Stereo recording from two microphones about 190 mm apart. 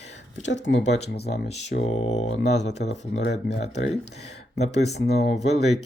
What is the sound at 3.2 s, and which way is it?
Speech, 65° left (ahead or behind).